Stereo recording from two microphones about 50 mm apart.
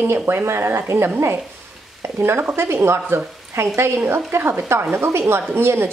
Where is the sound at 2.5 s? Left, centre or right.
Right.